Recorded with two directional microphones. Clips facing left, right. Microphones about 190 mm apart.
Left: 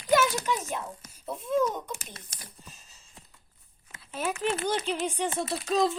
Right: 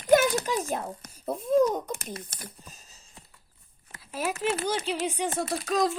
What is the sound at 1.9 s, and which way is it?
Speech, 60° right (ahead or behind).